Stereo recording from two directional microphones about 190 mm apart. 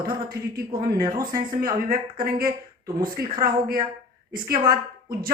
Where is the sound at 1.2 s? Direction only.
45° right (ahead or behind).